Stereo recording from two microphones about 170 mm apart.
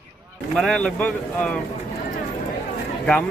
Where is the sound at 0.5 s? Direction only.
5° left (ahead or behind).